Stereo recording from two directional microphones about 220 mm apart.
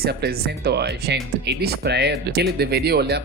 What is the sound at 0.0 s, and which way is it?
Speech, 45° right (ahead or behind).